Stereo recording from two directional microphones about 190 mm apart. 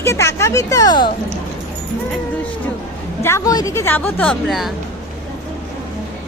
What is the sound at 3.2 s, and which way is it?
A woman's voice, 15° left (ahead or behind).